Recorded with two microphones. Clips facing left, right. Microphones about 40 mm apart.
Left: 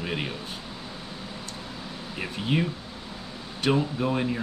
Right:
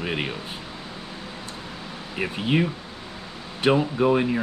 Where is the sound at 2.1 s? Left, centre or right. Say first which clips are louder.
Right 4 dB; right.